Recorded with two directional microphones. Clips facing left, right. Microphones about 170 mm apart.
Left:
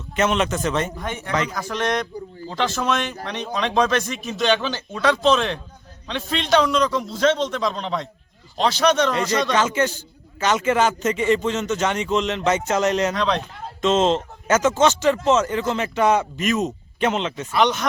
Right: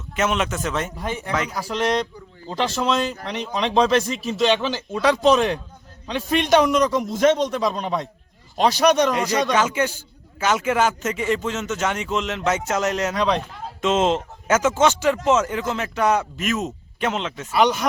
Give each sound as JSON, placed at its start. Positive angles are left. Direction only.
{"t": 0.2, "sound": "a man's voice", "side_deg": -5}
{"t": 1.7, "sound": "speech", "side_deg": -30}
{"t": 4.4, "sound": "a man's voice", "side_deg": -5}